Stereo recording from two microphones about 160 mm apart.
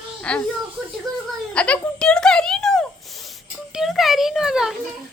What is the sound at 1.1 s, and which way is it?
Speech, 25° right (ahead or behind).